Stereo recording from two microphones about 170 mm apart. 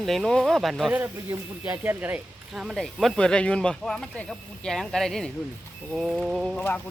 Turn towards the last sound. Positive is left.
turn(degrees=0)  # may be behind; listen again after turning